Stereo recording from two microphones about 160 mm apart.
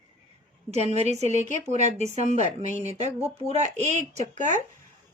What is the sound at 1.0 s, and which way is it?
A woman's voice, 45° right (ahead or behind).